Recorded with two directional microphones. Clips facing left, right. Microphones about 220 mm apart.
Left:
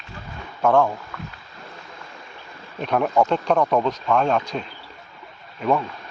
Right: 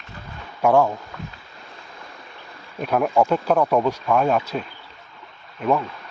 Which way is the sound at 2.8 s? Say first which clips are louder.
Right 1 dB; 5° right (ahead or behind).